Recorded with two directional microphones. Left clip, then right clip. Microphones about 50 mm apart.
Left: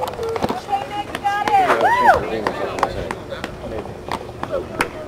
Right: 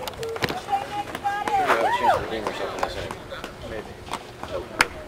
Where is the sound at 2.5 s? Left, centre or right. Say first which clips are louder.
Left 6 dB; centre.